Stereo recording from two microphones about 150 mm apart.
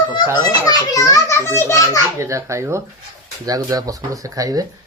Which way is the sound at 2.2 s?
20° right (ahead or behind).